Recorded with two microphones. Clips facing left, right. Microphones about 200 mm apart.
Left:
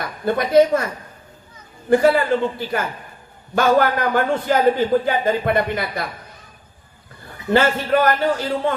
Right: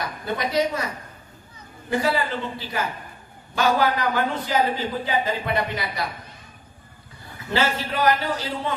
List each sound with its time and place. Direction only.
0.3 s a man's voice: 50° left (ahead or behind)
1.9 s a man's voice: 55° left (ahead or behind)
7.5 s a man's voice: 50° left (ahead or behind)